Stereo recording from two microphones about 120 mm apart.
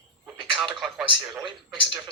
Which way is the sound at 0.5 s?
40° right (ahead or behind).